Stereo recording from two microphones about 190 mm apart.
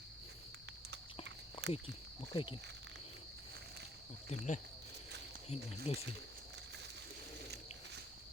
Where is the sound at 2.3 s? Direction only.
25° left (ahead or behind).